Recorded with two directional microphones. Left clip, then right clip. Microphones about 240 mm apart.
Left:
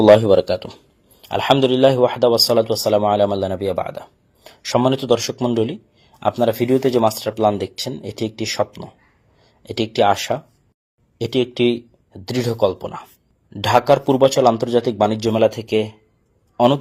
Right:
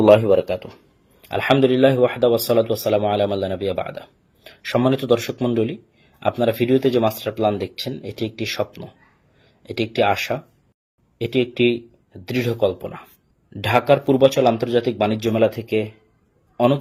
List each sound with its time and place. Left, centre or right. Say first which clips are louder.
0.1 s speech: left 2 dB; left
1.3 s speech: left 1 dB; centre
9.6 s speech: left 3 dB; centre